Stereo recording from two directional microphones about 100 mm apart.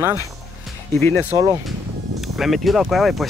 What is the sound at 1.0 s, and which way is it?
Speech, 25° left (ahead or behind).